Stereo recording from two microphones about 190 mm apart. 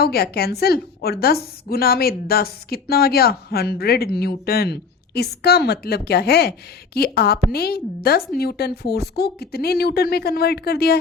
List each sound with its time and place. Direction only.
0.0 s a woman's voice: 55° left (ahead or behind)